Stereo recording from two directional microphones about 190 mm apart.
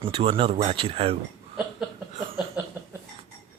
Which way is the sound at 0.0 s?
30° right (ahead or behind).